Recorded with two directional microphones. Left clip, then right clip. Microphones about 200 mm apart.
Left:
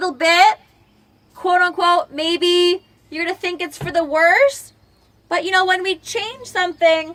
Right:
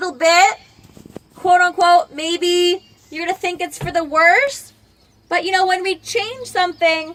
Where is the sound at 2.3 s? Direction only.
20° left (ahead or behind).